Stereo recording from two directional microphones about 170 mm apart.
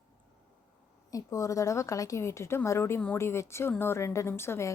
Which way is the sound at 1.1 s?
20° left (ahead or behind).